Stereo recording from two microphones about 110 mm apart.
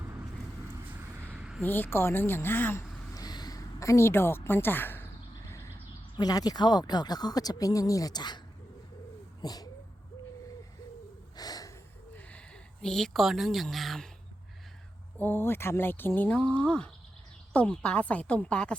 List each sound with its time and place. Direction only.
0.9 s a sound: 15° right (ahead or behind)
1.6 s a woman's voice: 20° left (ahead or behind)
3.2 s a sound: 40° left (ahead or behind); by 5.0 s 20° left (ahead or behind)
6.1 s speech: 35° left (ahead or behind)
9.4 s speech: 35° left (ahead or behind)
11.3 s snort: 35° left (ahead or behind)
12.8 s a woman's voice: 5° left (ahead or behind)
15.2 s speech: 20° left (ahead or behind)